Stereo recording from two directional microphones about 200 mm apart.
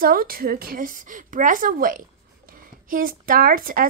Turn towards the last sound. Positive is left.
turn(degrees=-45)  # may be behind; listen again after turning